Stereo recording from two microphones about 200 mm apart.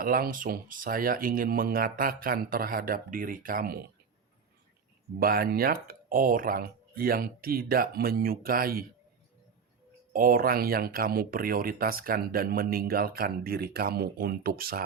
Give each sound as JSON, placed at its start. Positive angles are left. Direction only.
{"t": 0.0, "sound": "speech", "side_deg": -45}
{"t": 5.2, "sound": "speech", "side_deg": -50}
{"t": 10.1, "sound": "speech", "side_deg": -45}